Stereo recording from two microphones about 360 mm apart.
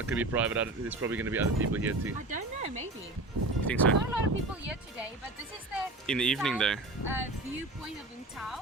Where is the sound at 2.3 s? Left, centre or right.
Centre.